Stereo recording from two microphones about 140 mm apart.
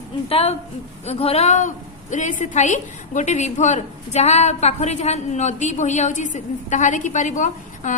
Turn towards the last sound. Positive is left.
turn(degrees=60)  # may be behind; listen again after turning